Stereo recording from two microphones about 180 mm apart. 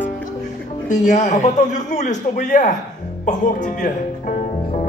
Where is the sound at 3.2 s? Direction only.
45° left (ahead or behind).